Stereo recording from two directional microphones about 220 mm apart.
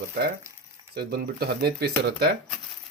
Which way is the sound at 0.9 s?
45° right (ahead or behind).